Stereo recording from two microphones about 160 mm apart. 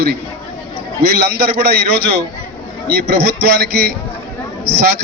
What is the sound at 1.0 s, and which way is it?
A man's voice, 80° right.